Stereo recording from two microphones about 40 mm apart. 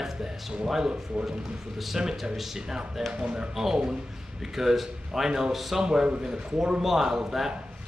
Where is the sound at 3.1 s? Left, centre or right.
Right; by 5.8 s centre.